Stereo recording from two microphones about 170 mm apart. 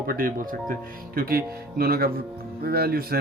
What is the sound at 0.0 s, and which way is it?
Speech, 60° right (ahead or behind).